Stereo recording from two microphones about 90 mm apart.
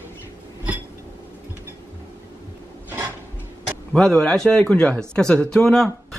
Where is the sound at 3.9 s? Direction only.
10° left (ahead or behind).